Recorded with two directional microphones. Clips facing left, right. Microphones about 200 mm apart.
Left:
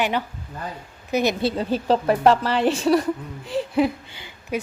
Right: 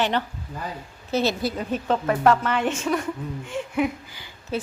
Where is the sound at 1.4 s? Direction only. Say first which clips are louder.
Left 4 dB; 30° left (ahead or behind).